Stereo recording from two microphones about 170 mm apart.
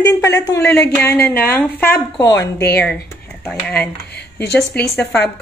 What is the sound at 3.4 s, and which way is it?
Speech, 5° left (ahead or behind).